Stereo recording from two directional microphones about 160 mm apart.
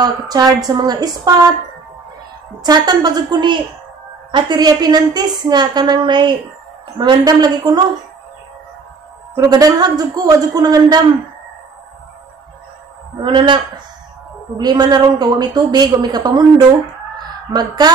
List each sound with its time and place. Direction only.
0.0 s a woman's voice: 25° right (ahead or behind)
2.6 s a woman's voice: 25° right (ahead or behind)
9.3 s a woman's voice: 25° right (ahead or behind)
13.2 s a man's voice: 30° right (ahead or behind)
14.6 s a woman's voice: 25° right (ahead or behind)